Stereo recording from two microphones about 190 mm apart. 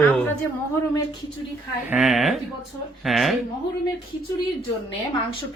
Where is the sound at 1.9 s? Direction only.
Centre (ahead or behind).